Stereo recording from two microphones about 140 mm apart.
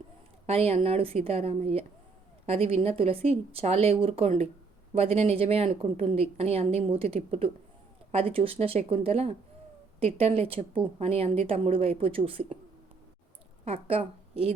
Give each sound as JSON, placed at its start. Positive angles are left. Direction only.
{"t": 0.4, "sound": "a woman's voice", "side_deg": -45}
{"t": 13.7, "sound": "a woman's voice", "side_deg": -45}